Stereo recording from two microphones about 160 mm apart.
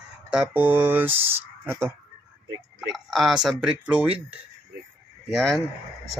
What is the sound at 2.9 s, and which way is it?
Speech, centre (ahead or behind).